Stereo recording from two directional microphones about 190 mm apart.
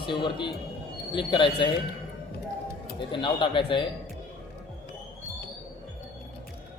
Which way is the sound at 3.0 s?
25° left (ahead or behind).